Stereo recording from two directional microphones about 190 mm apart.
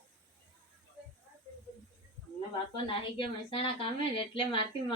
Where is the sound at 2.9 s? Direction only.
30° left (ahead or behind).